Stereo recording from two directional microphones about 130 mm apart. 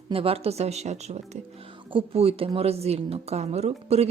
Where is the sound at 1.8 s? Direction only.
45° right (ahead or behind).